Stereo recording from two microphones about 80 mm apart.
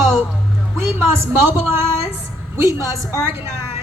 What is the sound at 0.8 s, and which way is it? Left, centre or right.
Speech, right.